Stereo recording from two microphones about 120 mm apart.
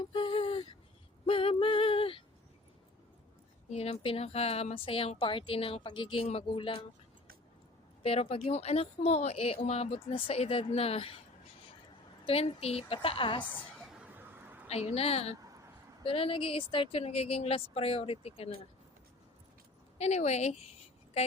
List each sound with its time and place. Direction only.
0.0 s a sound: 45° left (ahead or behind)
3.7 s speech: 60° left (ahead or behind); by 6.8 s 45° left (ahead or behind)
8.0 s speech: 55° left (ahead or behind)
12.2 s speech: 55° left (ahead or behind)
13.4 s a woman's voice: 15° left (ahead or behind)
13.8 s a sound: 10° right (ahead or behind)
14.7 s speech: 60° left (ahead or behind)
20.0 s speech: 65° left (ahead or behind)